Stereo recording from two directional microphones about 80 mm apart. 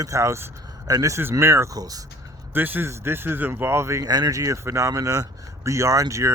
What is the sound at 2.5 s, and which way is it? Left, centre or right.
Speech, right.